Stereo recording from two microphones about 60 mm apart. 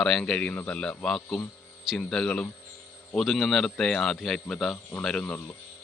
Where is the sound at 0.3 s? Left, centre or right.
Left.